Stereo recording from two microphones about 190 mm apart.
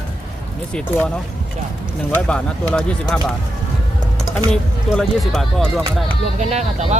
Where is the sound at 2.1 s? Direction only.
5° left (ahead or behind).